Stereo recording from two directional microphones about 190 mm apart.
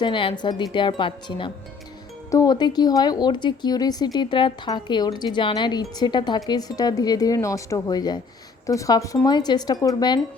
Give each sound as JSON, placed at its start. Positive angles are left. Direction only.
{"t": 0.0, "sound": "speech", "side_deg": 25}